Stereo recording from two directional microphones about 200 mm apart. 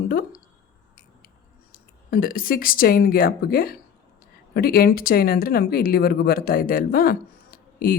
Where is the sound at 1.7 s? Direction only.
45° left (ahead or behind).